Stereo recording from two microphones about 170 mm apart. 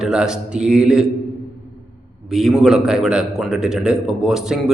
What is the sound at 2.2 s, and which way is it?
A man's voice, centre (ahead or behind).